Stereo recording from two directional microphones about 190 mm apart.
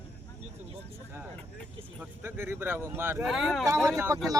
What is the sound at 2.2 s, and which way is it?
A man's voice, 10° right (ahead or behind).